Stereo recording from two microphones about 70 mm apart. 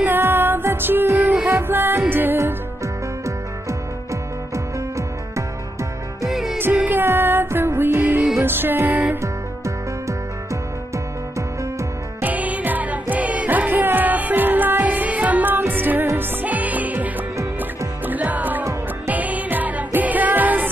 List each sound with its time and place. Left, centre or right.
0.0 s music: right
6.2 s music: centre
6.6 s music: right
12.2 s music: right